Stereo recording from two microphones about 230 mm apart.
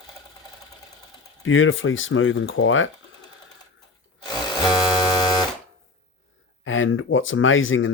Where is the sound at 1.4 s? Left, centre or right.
Left.